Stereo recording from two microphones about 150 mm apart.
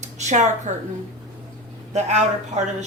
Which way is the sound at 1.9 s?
50° right (ahead or behind).